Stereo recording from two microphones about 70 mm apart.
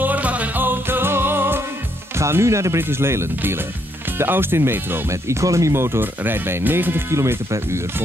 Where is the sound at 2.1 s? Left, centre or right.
Right.